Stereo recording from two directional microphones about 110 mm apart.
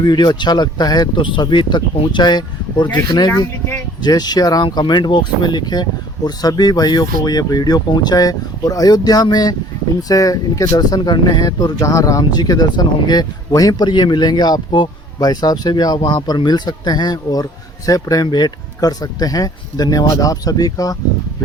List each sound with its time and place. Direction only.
0.0 s speech: 40° left (ahead or behind)